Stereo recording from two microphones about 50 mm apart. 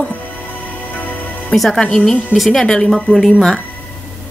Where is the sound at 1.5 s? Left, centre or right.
Centre.